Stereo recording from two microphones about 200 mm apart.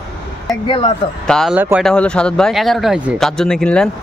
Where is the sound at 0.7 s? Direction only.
25° left (ahead or behind).